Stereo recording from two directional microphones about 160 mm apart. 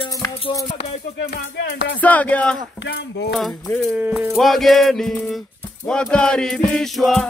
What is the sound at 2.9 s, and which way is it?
Speech, 90° left.